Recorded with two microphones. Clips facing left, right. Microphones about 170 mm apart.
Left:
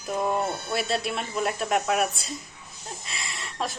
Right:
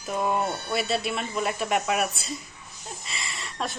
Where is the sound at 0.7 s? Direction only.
Centre (ahead or behind).